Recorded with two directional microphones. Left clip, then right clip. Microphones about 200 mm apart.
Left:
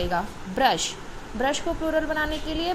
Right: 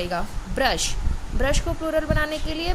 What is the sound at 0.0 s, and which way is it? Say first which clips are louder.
A woman's voice: left 1 dB; 15° right (ahead or behind).